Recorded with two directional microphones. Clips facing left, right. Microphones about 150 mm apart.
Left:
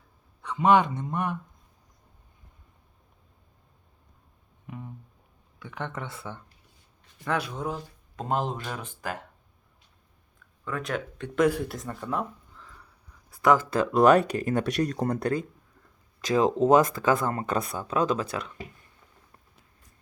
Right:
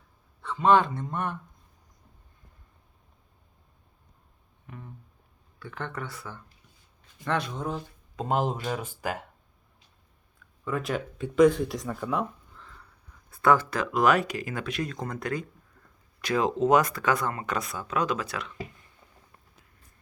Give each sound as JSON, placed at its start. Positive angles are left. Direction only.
{"t": 0.4, "sound": "speech", "side_deg": 15}
{"t": 4.6, "sound": "a sound", "side_deg": 15}
{"t": 5.5, "sound": "speech", "side_deg": 15}
{"t": 7.3, "sound": "speech", "side_deg": 5}
{"t": 10.7, "sound": "speech", "side_deg": -5}
{"t": 13.3, "sound": "a sound", "side_deg": 15}
{"t": 13.7, "sound": "speech", "side_deg": 30}
{"t": 16.6, "sound": "speech", "side_deg": 30}